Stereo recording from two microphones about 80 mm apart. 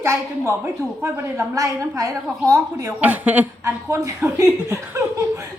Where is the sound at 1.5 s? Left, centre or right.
Right.